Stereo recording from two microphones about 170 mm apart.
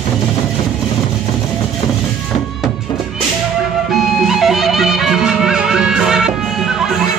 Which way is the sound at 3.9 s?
Centre (ahead or behind).